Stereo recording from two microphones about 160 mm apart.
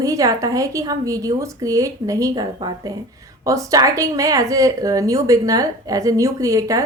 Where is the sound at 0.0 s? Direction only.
20° right (ahead or behind).